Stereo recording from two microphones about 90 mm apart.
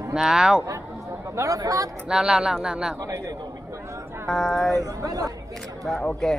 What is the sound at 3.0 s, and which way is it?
Speech, 40° right (ahead or behind).